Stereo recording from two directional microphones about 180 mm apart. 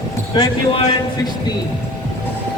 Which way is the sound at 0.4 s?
25° left (ahead or behind).